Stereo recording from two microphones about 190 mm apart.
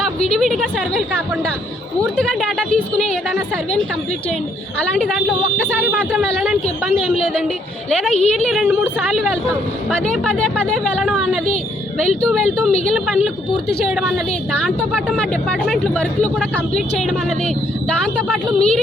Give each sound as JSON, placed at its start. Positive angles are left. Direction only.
{"t": 0.3, "sound": "speech", "side_deg": 0}
{"t": 2.1, "sound": "speech", "side_deg": 5}
{"t": 4.8, "sound": "speech", "side_deg": 5}
{"t": 6.1, "sound": "speech", "side_deg": 5}
{"t": 8.1, "sound": "a woman's voice", "side_deg": 35}
{"t": 8.4, "sound": "speech", "side_deg": -5}
{"t": 10.3, "sound": "speech", "side_deg": 5}